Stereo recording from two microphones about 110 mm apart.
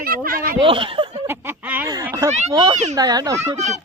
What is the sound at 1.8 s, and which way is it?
Speech, 35° right (ahead or behind).